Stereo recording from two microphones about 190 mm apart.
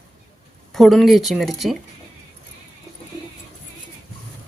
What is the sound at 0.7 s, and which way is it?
Speech, centre (ahead or behind).